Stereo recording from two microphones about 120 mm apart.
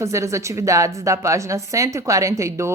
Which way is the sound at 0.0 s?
25° right (ahead or behind).